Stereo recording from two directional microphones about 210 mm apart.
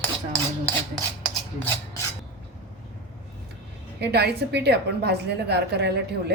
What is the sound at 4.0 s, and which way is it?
Speech, 50° right (ahead or behind).